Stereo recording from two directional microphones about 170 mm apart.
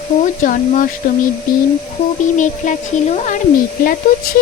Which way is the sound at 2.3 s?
45° left (ahead or behind).